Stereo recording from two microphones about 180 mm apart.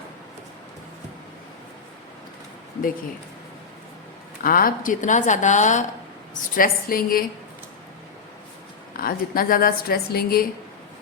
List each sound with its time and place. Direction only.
4.4 s a woman's voice: 50° left (ahead or behind)
6.6 s a woman's voice: 55° left (ahead or behind)
9.0 s a woman's voice: 55° left (ahead or behind)